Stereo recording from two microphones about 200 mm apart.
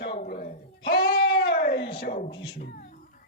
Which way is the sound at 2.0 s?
45° left (ahead or behind).